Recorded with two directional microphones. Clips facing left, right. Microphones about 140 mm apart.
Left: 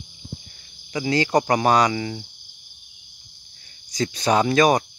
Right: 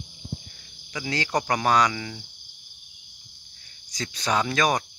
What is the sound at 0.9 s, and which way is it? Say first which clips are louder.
Speech: left 7 dB; 20° left (ahead or behind).